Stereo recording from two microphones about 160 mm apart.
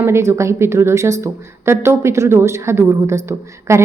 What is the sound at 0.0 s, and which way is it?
A woman's voice, 15° right (ahead or behind).